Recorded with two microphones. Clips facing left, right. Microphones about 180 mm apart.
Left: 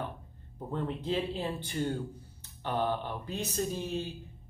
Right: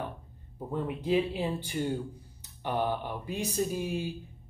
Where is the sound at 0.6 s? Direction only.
10° right (ahead or behind).